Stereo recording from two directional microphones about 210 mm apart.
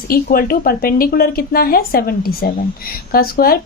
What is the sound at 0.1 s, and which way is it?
A woman's voice, 45° left (ahead or behind).